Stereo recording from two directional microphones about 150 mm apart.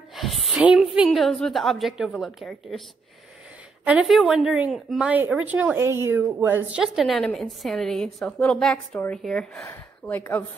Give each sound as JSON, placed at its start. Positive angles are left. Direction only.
{"t": 0.1, "sound": "a woman's voice", "side_deg": 0}
{"t": 3.8, "sound": "a woman's voice", "side_deg": -5}